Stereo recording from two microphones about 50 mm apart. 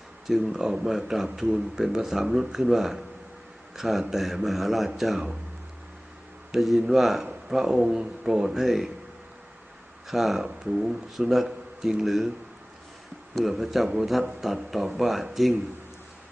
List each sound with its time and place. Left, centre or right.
0.3 s speech: centre
6.5 s speech: centre
10.1 s speech: centre
13.4 s speech: centre